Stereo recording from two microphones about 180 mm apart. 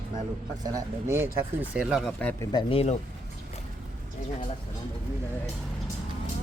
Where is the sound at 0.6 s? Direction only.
20° right (ahead or behind).